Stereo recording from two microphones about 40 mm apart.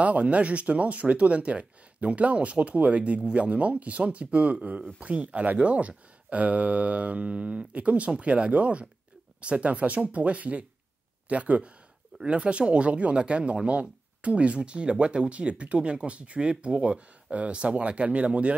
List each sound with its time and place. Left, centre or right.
0.0 s speech: right
12.2 s speech: right